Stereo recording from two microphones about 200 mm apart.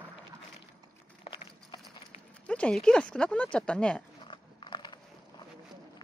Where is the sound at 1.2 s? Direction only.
25° left (ahead or behind).